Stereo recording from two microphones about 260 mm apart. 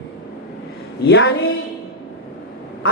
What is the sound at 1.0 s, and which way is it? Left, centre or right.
Speech, left.